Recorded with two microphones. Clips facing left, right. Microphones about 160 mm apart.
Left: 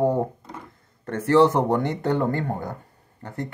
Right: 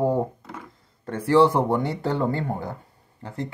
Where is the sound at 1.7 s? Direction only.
50° left (ahead or behind).